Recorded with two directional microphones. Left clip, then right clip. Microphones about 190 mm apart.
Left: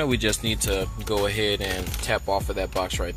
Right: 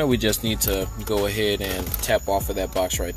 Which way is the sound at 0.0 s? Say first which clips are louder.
Right 2 dB; 20° right (ahead or behind).